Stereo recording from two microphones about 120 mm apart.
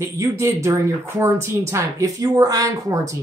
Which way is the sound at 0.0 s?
25° right (ahead or behind).